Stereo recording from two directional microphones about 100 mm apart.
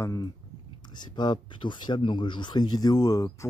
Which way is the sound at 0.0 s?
35° left (ahead or behind).